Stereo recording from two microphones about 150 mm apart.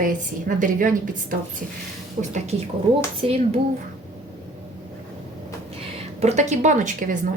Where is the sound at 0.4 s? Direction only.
60° right (ahead or behind).